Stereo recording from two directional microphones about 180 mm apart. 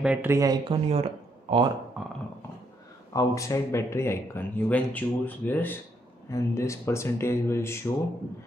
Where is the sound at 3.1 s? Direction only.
15° left (ahead or behind).